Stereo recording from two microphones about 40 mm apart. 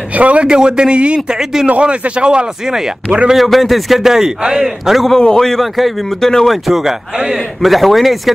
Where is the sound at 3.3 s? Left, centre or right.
Centre.